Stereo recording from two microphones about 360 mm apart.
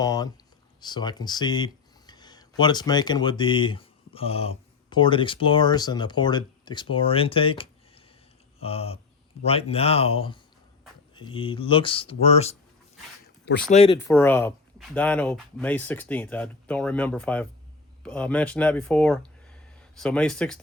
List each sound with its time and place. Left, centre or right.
0.0 s speech: centre
8.5 s a sound: centre
9.4 s speech: centre